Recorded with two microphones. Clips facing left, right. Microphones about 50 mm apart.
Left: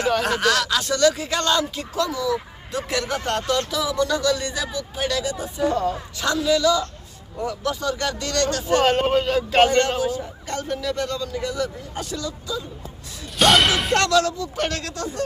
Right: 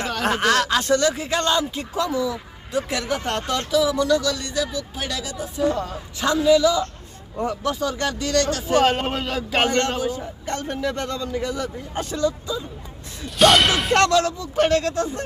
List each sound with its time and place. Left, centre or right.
0.3 s speech: right
2.3 s speech: centre
3.4 s speech: centre
3.7 s speech: centre
6.1 s a man's voice: centre
7.6 s speech: centre
10.4 s speech: right
13.4 s whip: centre
13.9 s speech: right